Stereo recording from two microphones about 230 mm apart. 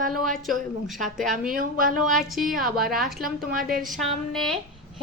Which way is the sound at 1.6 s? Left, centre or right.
Right.